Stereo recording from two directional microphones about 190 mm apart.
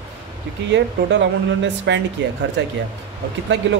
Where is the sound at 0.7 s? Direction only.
70° right (ahead or behind).